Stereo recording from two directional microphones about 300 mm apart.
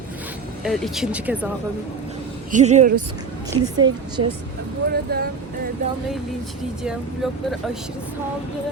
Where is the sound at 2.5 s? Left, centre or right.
Right.